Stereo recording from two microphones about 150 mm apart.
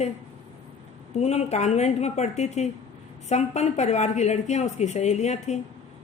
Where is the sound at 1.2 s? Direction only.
45° left (ahead or behind).